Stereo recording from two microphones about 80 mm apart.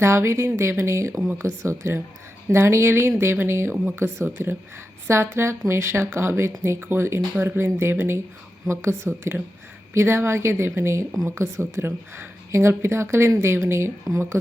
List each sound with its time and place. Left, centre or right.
0.0 s speech: right
1.1 s speech: centre
1.4 s speech: right